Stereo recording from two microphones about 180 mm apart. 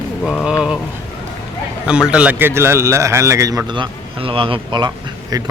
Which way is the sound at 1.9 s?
5° right (ahead or behind).